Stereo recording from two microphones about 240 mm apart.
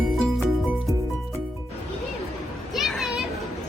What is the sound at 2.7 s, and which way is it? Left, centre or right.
Children playing, centre.